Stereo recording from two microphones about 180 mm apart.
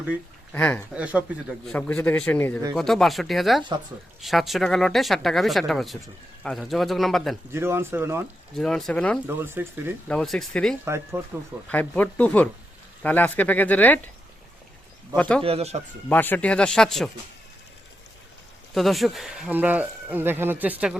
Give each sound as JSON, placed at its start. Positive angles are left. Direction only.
{"t": 0.5, "sound": "speech", "side_deg": 10}
{"t": 0.9, "sound": "speech", "side_deg": -5}
{"t": 1.6, "sound": "speech", "side_deg": 5}
{"t": 7.5, "sound": "speech", "side_deg": -15}
{"t": 8.5, "sound": "speech", "side_deg": 5}
{"t": 9.2, "sound": "speech", "side_deg": -10}
{"t": 10.1, "sound": "speech", "side_deg": 5}
{"t": 10.8, "sound": "speech", "side_deg": -15}
{"t": 11.7, "sound": "speech", "side_deg": 10}
{"t": 15.1, "sound": "speech", "side_deg": 5}
{"t": 15.4, "sound": "speech", "side_deg": -35}
{"t": 16.0, "sound": "speech", "side_deg": 10}
{"t": 18.7, "sound": "speech", "side_deg": 0}